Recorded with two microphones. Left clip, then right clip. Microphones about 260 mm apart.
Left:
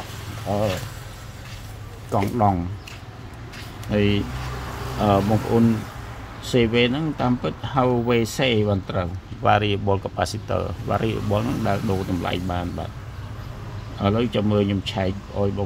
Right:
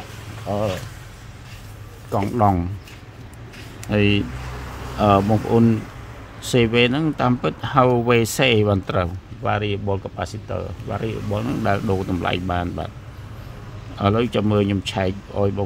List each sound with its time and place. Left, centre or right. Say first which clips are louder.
0.5 s speech: even; centre
2.0 s speech: right 2 dB; centre
3.9 s speech: right 2 dB; centre
9.4 s speech: left 4 dB; centre
11.4 s speech: right 3 dB; centre
13.9 s speech: right 2 dB; centre